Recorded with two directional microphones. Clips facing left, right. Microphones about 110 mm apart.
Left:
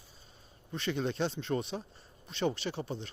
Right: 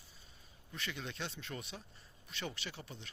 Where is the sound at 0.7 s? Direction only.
30° left (ahead or behind).